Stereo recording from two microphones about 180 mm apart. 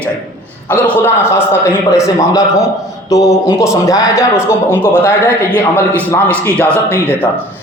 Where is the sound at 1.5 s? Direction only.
15° left (ahead or behind).